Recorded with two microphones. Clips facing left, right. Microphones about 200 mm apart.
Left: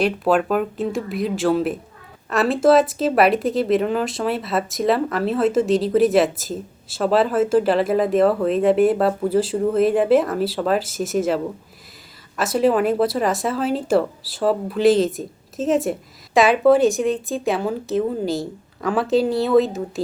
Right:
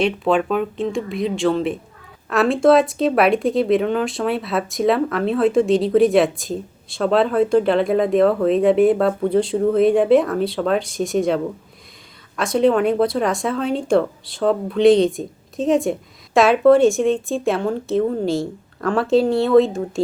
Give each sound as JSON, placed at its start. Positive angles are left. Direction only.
{"t": 0.0, "sound": "speech", "side_deg": 0}
{"t": 12.4, "sound": "speech", "side_deg": 5}